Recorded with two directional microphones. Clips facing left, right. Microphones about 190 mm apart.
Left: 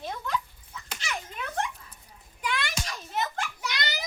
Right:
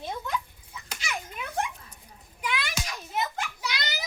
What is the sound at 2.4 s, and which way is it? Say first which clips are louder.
Children playing: even; 10° right (ahead or behind).